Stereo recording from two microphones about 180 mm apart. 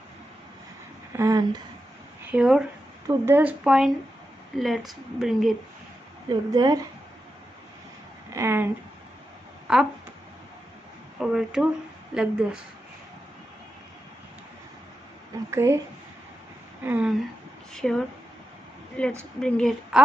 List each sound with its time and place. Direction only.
1.1 s speech: 20° right (ahead or behind)
2.3 s a woman's voice: centre (ahead or behind)
6.2 s speech: 20° right (ahead or behind)
8.3 s a sound: 15° right (ahead or behind)
9.7 s a woman's voice: 5° right (ahead or behind)
11.1 s a woman's voice: 5° right (ahead or behind)
15.5 s speech: 15° right (ahead or behind)
16.8 s speech: 10° right (ahead or behind)
17.7 s a woman's voice: 5° left (ahead or behind)